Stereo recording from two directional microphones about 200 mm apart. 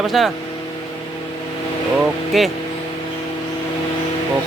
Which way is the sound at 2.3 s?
Centre (ahead or behind).